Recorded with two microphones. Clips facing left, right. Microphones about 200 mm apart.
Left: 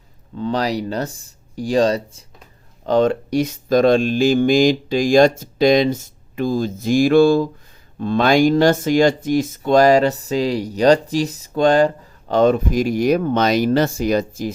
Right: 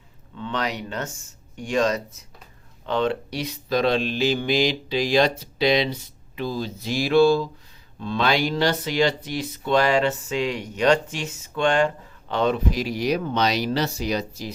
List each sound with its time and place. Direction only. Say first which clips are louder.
0.3 s speech: left 7 dB; 35° left (ahead or behind)